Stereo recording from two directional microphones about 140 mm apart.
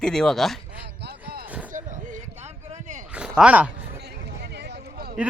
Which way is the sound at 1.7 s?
65° right (ahead or behind).